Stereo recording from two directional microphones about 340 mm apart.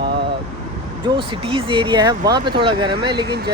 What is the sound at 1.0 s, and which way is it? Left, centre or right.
Speech, centre.